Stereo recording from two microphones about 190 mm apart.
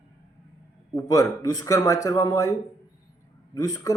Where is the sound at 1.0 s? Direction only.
20° left (ahead or behind).